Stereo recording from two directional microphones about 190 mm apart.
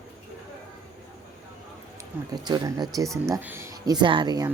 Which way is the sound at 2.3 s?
20° right (ahead or behind).